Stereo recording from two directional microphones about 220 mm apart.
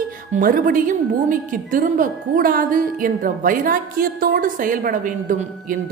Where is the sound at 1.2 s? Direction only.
35° right (ahead or behind).